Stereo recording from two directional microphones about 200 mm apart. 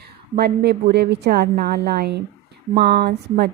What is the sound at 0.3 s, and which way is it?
A woman's voice, 55° right (ahead or behind).